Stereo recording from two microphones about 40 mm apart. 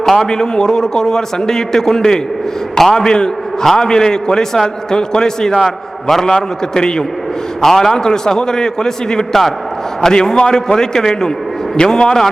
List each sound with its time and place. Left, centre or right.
0.0 s a man's voice: centre